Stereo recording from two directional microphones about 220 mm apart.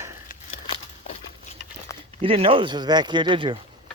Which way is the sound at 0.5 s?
25° left (ahead or behind).